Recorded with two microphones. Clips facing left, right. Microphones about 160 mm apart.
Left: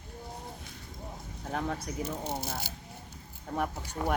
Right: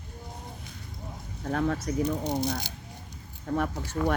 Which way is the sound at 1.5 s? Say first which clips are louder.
Right 6 dB; 10° left (ahead or behind).